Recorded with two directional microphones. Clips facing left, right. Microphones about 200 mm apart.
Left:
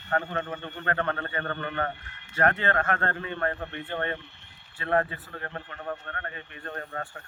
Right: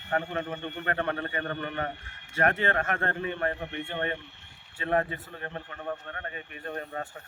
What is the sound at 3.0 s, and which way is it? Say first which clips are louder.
A man's voice: even; 15° right (ahead or behind).